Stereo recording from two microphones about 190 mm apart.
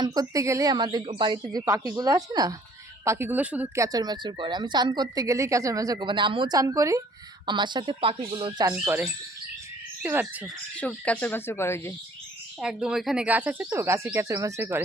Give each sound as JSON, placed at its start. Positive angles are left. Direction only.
{"t": 0.0, "sound": "speech", "side_deg": -20}
{"t": 3.8, "sound": "speech", "side_deg": -20}
{"t": 10.8, "sound": "speech", "side_deg": 5}
{"t": 12.5, "sound": "speech", "side_deg": -5}